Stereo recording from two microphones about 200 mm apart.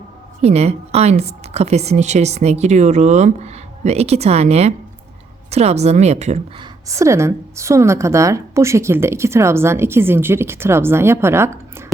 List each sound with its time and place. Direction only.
0.4 s a woman's voice: 30° right (ahead or behind)
6.6 s a woman's voice: 15° right (ahead or behind)